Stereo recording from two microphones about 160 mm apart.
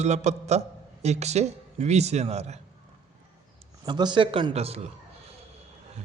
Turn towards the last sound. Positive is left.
turn(degrees=-40)  # may be behind; listen again after turning